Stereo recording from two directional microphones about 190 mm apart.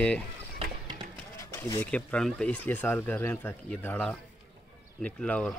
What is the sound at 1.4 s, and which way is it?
Speech, 15° left (ahead or behind).